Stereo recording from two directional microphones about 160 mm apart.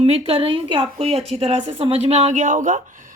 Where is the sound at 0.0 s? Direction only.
40° right (ahead or behind).